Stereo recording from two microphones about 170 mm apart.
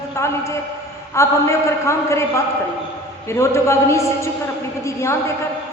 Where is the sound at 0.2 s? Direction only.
15° left (ahead or behind).